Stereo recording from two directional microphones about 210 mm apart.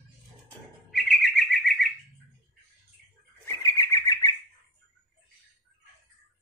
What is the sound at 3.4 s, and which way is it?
Bird, 15° left (ahead or behind).